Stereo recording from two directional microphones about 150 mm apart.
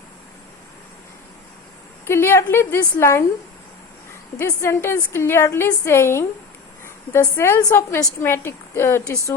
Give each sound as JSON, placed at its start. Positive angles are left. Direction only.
{"t": 2.0, "sound": "a woman's voice", "side_deg": 15}
{"t": 4.4, "sound": "a woman's voice", "side_deg": 15}